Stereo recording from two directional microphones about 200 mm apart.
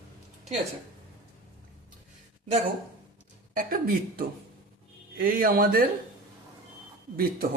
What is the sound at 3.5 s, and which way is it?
Speech, 45° right (ahead or behind).